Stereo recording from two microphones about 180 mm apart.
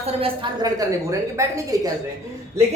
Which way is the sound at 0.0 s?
30° right (ahead or behind).